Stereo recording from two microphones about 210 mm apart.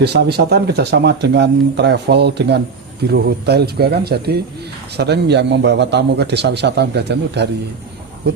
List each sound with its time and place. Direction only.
0.0 s speech: 50° right (ahead or behind)